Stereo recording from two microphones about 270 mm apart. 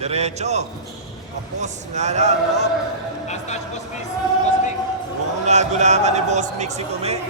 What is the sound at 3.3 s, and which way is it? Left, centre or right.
Music, left.